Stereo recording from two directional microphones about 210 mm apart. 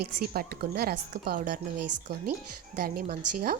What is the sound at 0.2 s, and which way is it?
A woman's voice, 45° right (ahead or behind).